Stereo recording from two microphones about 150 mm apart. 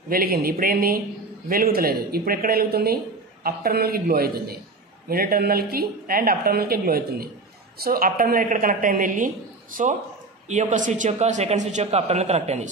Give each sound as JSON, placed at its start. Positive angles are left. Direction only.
{"t": 0.1, "sound": "a woman's voice", "side_deg": -90}
{"t": 7.8, "sound": "a woman's voice", "side_deg": -75}
{"t": 10.5, "sound": "a man's voice", "side_deg": -55}